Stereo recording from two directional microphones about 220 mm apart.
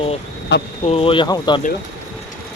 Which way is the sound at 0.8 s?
25° left (ahead or behind).